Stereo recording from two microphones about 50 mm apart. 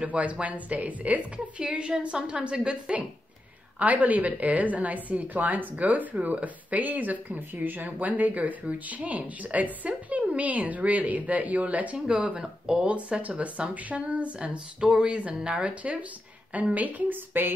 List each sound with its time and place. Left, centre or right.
0.0 s a woman's voice: right